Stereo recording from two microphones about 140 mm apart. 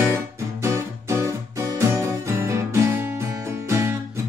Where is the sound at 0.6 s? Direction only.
20° right (ahead or behind).